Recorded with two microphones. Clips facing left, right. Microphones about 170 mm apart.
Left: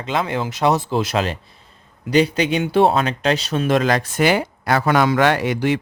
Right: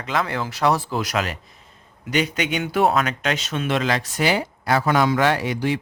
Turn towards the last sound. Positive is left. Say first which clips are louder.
# left 3 dB
turn(degrees=70)  # may be behind; listen again after turning